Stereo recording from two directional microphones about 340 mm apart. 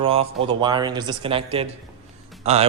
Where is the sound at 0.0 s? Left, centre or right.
Centre.